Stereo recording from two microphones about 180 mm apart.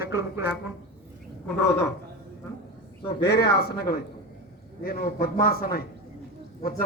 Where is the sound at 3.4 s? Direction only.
65° left (ahead or behind).